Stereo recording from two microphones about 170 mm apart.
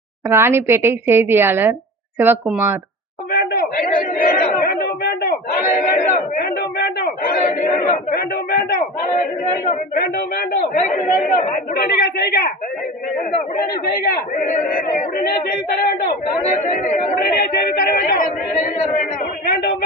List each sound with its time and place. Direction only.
0.3 s a woman's voice: 15° right (ahead or behind)
3.3 s chatter: 60° left (ahead or behind)
9.9 s speech: 60° left (ahead or behind)
10.8 s speech: 45° left (ahead or behind); by 12.5 s 65° left (ahead or behind)
13.8 s speech: 65° left (ahead or behind); by 17.2 s 40° left (ahead or behind)
17.2 s speech: 60° left (ahead or behind)